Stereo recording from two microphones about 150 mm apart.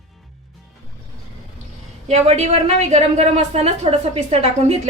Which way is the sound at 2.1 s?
50° right (ahead or behind).